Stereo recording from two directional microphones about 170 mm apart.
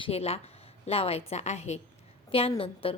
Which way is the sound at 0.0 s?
35° left (ahead or behind).